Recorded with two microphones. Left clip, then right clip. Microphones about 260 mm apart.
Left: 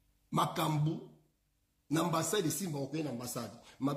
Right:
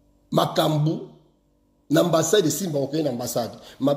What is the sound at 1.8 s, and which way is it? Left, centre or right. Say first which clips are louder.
Speech: right 14 dB; centre.